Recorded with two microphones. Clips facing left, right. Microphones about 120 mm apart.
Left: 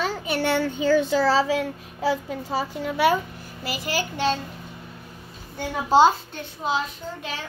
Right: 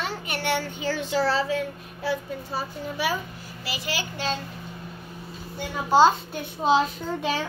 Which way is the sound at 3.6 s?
45° left (ahead or behind).